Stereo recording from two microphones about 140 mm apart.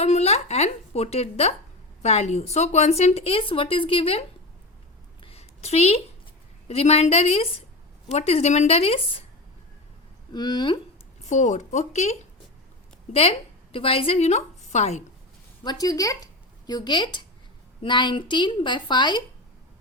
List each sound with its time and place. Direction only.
0.0 s a woman's voice: 50° left (ahead or behind)
5.2 s a sound: 45° left (ahead or behind)
6.7 s speech: 50° left (ahead or behind)
10.3 s a woman's voice: 30° left (ahead or behind)
11.3 s speech: 60° left (ahead or behind)
13.7 s a woman's voice: 40° left (ahead or behind)
15.6 s a woman's voice: 30° left (ahead or behind)